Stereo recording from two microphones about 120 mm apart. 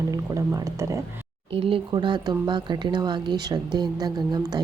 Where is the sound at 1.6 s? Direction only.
50° right (ahead or behind).